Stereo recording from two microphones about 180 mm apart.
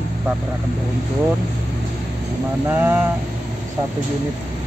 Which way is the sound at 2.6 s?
10° right (ahead or behind).